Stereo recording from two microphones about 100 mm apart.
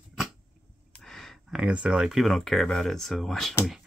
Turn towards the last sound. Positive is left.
turn(degrees=0)  # may be behind; listen again after turning